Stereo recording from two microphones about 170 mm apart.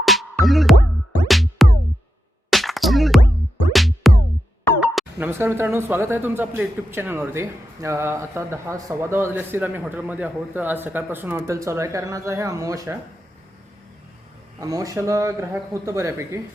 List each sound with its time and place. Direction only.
0.0 s music: centre (ahead or behind)
4.8 s speech: 10° right (ahead or behind)
14.6 s speech: 20° right (ahead or behind)